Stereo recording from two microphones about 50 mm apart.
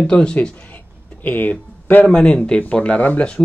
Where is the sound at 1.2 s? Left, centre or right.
Left.